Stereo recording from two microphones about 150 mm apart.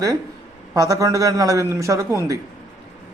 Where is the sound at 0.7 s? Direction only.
20° right (ahead or behind).